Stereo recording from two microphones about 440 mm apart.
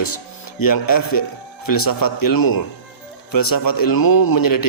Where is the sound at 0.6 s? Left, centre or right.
Left.